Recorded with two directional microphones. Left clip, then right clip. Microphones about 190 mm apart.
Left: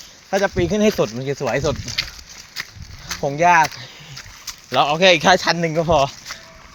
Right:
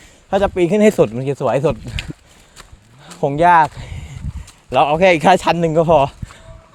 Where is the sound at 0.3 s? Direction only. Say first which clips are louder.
Right 4 dB; 65° right (ahead or behind).